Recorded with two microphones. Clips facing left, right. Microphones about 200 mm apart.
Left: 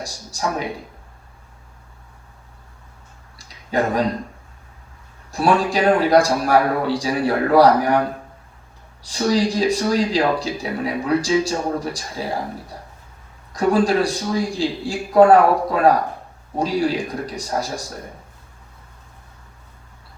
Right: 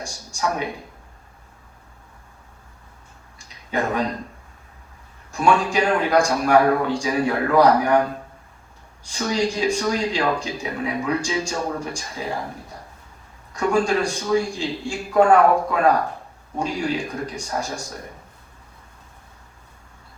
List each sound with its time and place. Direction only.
0.0 s speech: 35° left (ahead or behind)
3.3 s a sound: 35° left (ahead or behind)
5.3 s speech: 35° left (ahead or behind)
9.0 s speech: 35° left (ahead or behind)
13.5 s speech: 35° left (ahead or behind)